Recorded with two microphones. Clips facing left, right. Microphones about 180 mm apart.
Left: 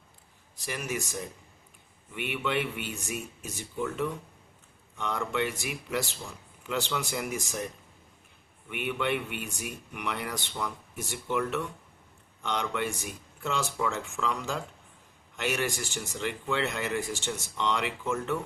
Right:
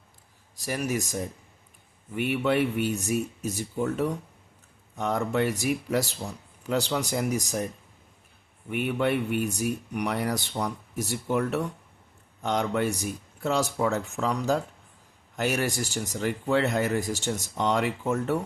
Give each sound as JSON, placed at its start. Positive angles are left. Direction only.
{"t": 0.5, "sound": "speech", "side_deg": -40}
{"t": 8.7, "sound": "speech", "side_deg": -40}